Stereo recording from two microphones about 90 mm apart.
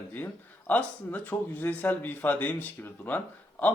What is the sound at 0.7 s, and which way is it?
Speech, 15° left (ahead or behind).